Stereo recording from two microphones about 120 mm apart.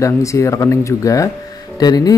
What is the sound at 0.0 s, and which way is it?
Speech, 25° left (ahead or behind).